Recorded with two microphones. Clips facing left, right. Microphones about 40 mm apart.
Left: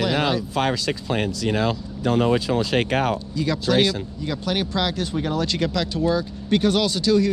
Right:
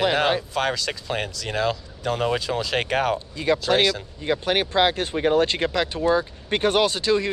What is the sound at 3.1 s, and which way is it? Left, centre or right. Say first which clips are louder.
Speech: right 2 dB; right.